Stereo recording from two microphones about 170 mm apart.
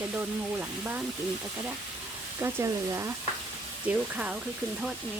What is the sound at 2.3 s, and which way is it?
Speech, 15° right (ahead or behind).